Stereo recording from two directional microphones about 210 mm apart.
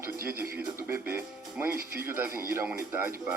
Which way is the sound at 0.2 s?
45° right (ahead or behind).